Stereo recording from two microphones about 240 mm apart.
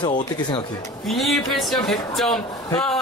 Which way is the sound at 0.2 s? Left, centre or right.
Centre.